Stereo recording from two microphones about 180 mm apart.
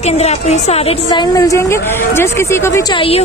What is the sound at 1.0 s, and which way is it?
A woman's voice, 20° left (ahead or behind).